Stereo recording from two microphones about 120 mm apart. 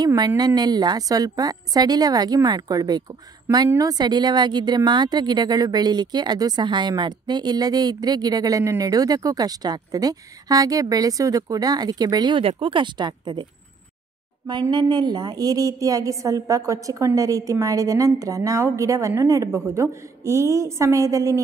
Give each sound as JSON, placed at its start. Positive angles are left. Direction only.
{"t": 0.0, "sound": "speech", "side_deg": -35}
{"t": 14.5, "sound": "a woman's voice", "side_deg": -40}